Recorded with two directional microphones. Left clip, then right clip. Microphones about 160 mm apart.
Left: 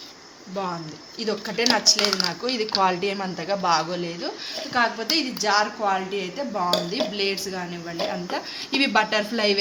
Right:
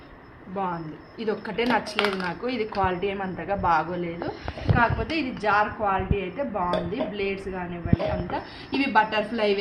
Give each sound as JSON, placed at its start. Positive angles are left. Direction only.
{"t": 1.2, "sound": "speech", "side_deg": 0}
{"t": 2.8, "sound": "a woman's voice", "side_deg": 20}